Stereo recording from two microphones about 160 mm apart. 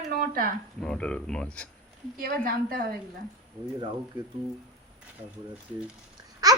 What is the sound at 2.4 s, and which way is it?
Speech, 65° right (ahead or behind).